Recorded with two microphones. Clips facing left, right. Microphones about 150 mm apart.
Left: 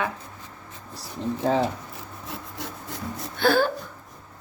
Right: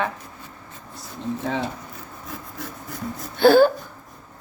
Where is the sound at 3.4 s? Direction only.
30° right (ahead or behind).